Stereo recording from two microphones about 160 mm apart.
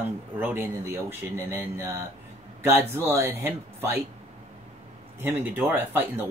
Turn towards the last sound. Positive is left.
turn(degrees=-15)  # may be behind; listen again after turning